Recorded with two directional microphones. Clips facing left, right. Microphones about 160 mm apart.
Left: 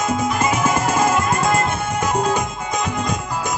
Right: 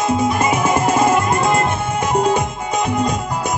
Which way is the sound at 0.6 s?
30° right (ahead or behind).